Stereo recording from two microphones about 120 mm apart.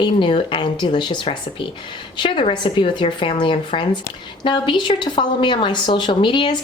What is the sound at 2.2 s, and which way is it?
A woman's voice, 40° left (ahead or behind).